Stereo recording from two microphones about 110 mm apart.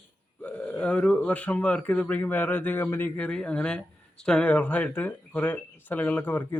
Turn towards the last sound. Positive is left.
turn(degrees=15)  # may be behind; listen again after turning